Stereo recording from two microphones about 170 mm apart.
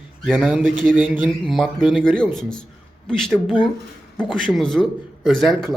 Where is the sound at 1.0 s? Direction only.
10° right (ahead or behind).